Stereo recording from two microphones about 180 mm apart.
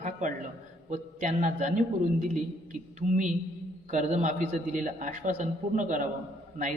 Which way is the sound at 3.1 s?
45° right (ahead or behind).